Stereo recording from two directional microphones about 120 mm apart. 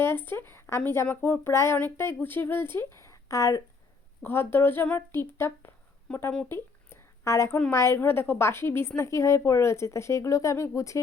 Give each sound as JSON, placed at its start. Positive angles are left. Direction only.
{"t": 0.0, "sound": "speech", "side_deg": 20}
{"t": 6.5, "sound": "a sound", "side_deg": 20}
{"t": 7.7, "sound": "speech", "side_deg": 20}